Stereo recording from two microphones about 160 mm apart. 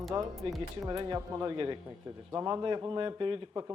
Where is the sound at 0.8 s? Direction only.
25° right (ahead or behind).